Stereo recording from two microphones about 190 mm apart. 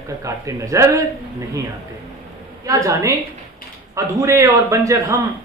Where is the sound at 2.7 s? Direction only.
15° right (ahead or behind).